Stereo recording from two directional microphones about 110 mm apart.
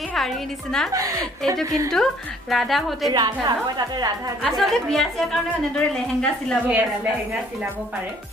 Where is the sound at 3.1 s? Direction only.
40° right (ahead or behind).